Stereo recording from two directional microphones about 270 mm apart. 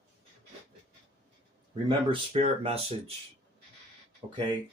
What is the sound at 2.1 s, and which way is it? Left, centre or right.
Speech, right.